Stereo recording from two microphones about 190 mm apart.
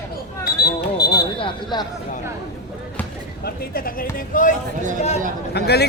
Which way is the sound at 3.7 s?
50° left (ahead or behind).